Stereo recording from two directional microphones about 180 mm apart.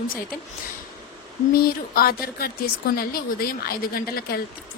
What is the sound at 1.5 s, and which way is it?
A woman's voice, 55° left (ahead or behind).